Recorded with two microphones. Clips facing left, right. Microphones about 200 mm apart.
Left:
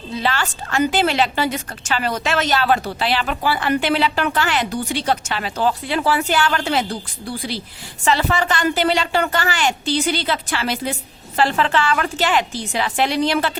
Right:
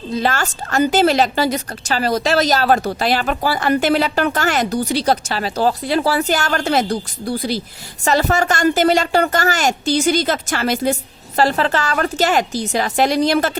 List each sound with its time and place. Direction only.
0.1 s a woman's voice: 45° right (ahead or behind)